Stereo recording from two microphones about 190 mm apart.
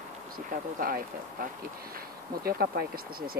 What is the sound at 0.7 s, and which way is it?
Speech, 50° right (ahead or behind).